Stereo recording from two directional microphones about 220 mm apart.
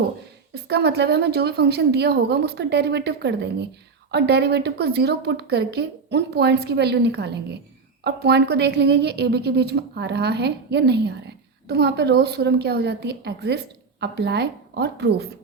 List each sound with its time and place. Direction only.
0.7 s a woman's voice: 50° right (ahead or behind)